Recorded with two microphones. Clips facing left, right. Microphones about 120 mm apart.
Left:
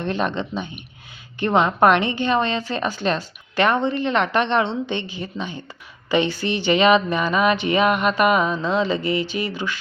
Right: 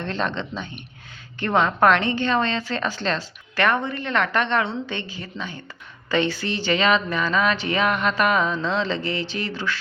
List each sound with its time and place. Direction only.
0.0 s a woman's voice: 15° left (ahead or behind)